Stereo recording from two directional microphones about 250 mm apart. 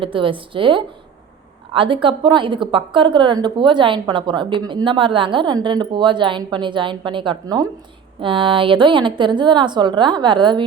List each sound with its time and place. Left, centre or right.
0.0 s a woman's voice: right